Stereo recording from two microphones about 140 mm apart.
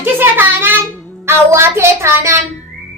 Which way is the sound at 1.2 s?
20° right (ahead or behind).